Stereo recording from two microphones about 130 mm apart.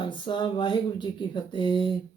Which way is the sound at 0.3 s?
35° left (ahead or behind).